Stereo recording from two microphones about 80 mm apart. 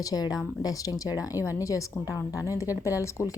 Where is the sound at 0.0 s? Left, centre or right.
Left.